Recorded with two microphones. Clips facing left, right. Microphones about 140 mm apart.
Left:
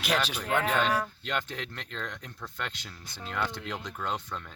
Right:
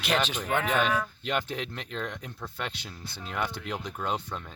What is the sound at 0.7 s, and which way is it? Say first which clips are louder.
Speech: right 1 dB; 15° right (ahead or behind).